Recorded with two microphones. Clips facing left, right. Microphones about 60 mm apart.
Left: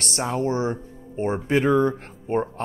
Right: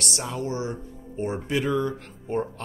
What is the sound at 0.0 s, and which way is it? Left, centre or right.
Speech, left.